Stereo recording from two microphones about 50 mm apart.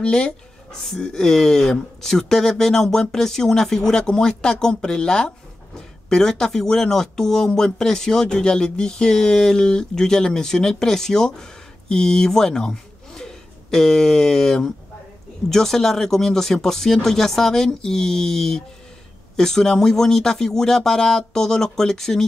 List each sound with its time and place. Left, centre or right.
0.0 s speech: centre
0.7 s speech: centre